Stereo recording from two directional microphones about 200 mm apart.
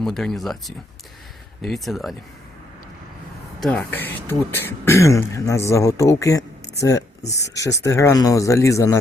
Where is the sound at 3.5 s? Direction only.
5° left (ahead or behind).